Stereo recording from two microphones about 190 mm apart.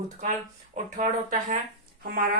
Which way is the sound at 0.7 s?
40° right (ahead or behind).